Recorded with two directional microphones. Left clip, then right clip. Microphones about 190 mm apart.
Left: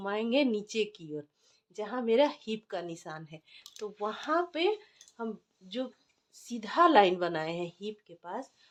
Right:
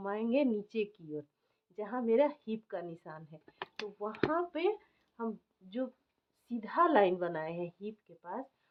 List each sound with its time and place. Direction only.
0.0 s a woman's voice: 30° left (ahead or behind)
6.5 s a woman's voice: 30° left (ahead or behind)